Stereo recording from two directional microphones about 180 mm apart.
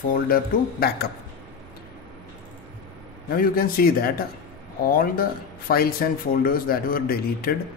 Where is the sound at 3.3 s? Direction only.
55° left (ahead or behind).